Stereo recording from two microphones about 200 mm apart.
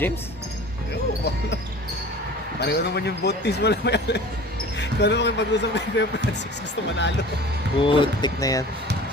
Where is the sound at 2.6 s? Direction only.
55° left (ahead or behind).